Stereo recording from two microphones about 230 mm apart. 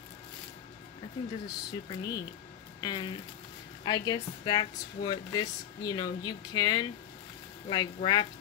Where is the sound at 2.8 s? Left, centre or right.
Left.